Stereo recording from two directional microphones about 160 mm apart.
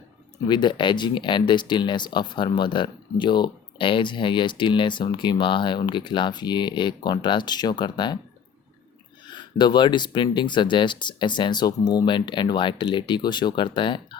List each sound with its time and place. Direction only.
0.4 s speech: 30° left (ahead or behind)
9.3 s speech: 30° left (ahead or behind)